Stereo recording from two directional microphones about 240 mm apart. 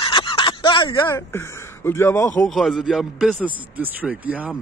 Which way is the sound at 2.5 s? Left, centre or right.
Centre.